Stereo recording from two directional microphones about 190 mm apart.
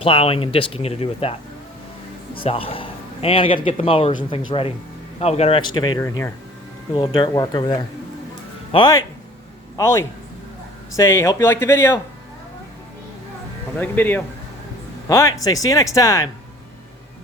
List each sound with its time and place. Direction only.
0.0 s a man's voice: 30° left (ahead or behind)
6.9 s speech: 25° left (ahead or behind)
13.7 s speech: 10° left (ahead or behind)